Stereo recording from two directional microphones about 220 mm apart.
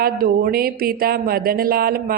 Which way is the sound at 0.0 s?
40° right (ahead or behind).